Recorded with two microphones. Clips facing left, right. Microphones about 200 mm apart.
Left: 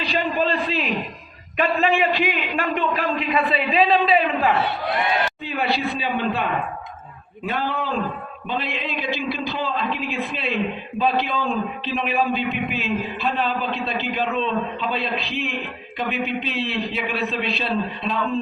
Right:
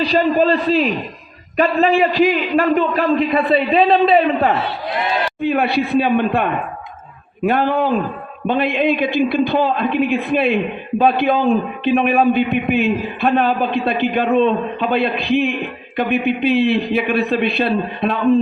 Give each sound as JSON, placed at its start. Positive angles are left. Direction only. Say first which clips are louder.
{"t": 0.0, "sound": "a man's voice", "louder": "right 8 dB", "side_deg": -40}
{"t": 5.4, "sound": "a man's voice", "louder": "right 7 dB", "side_deg": -55}